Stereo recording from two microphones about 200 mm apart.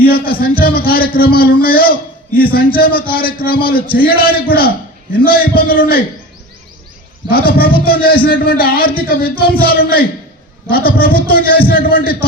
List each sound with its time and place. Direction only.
0.0 s a man's voice: 50° left (ahead or behind)
7.3 s a man's voice: 50° left (ahead or behind)